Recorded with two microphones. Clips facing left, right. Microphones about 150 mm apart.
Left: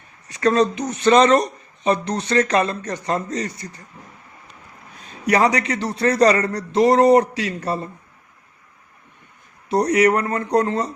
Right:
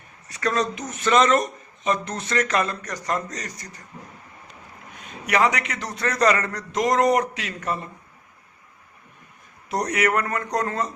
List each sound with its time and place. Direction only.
0.3 s speech: 35° left (ahead or behind)
4.9 s speech: 35° left (ahead or behind)
9.6 s speech: 30° left (ahead or behind)